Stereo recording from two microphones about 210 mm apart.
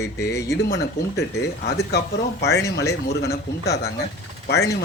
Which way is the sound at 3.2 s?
50° left (ahead or behind).